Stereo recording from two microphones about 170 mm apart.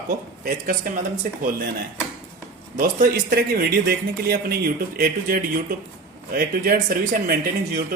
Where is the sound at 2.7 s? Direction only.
60° right (ahead or behind).